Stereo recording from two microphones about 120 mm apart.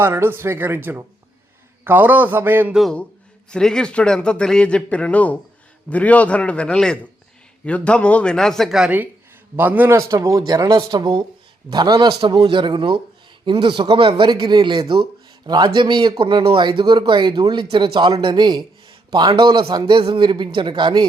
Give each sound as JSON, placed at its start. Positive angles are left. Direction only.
{"t": 0.0, "sound": "a man's voice", "side_deg": -20}
{"t": 3.5, "sound": "a man's voice", "side_deg": 5}
{"t": 10.1, "sound": "speech", "side_deg": -25}